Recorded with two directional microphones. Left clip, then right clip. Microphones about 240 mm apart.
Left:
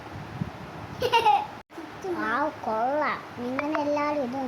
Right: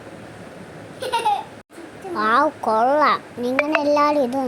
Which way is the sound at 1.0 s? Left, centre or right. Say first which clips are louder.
Even; centre.